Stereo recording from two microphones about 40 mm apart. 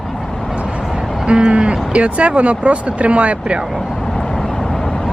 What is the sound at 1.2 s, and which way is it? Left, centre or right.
Speech, right.